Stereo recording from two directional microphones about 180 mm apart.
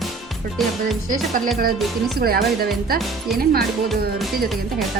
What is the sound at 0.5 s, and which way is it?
Speech, centre (ahead or behind).